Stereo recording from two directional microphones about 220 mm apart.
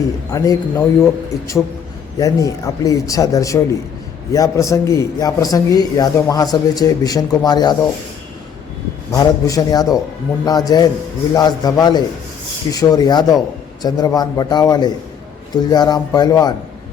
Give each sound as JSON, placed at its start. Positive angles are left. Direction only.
{"t": 0.3, "sound": "a man's voice", "side_deg": 15}
{"t": 9.1, "sound": "a man's voice", "side_deg": 15}